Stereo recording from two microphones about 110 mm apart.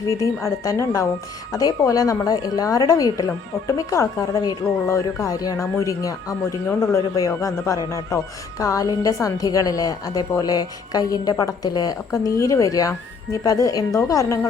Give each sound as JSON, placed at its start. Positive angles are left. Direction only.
{"t": 0.4, "sound": "a woman's voice", "side_deg": 30}
{"t": 6.7, "sound": "speech", "side_deg": 15}
{"t": 7.2, "sound": "a woman's voice", "side_deg": 30}